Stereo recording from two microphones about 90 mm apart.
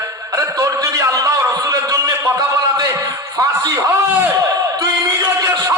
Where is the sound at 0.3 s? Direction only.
40° right (ahead or behind).